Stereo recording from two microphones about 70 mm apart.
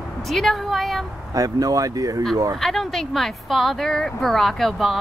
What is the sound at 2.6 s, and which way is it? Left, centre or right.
Speech, centre.